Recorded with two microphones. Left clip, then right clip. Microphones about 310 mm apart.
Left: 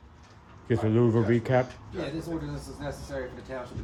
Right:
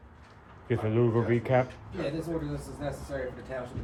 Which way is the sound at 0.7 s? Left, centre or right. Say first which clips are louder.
Left 3 dB; left.